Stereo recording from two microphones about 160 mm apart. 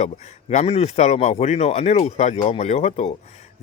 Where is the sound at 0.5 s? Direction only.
40° left (ahead or behind).